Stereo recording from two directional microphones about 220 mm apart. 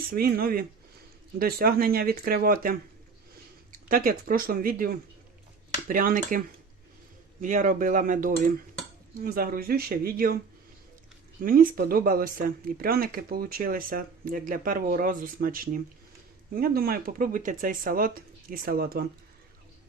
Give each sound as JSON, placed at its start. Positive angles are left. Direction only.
{"t": 0.1, "sound": "speech", "side_deg": -45}
{"t": 5.9, "sound": "speech", "side_deg": -40}
{"t": 7.4, "sound": "speech", "side_deg": -35}
{"t": 11.3, "sound": "speech", "side_deg": -40}